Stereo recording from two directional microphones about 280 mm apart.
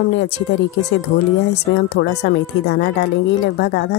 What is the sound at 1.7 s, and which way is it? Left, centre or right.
A woman's voice, left.